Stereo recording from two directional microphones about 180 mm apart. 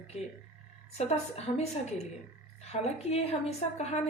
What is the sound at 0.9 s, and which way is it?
Speech, 35° left (ahead or behind).